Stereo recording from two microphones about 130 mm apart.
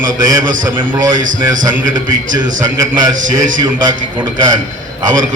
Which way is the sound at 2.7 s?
30° right (ahead or behind).